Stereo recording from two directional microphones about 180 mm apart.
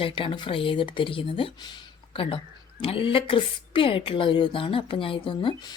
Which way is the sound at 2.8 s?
30° left (ahead or behind).